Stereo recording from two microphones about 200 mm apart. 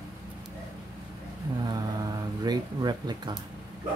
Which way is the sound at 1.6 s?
20° right (ahead or behind).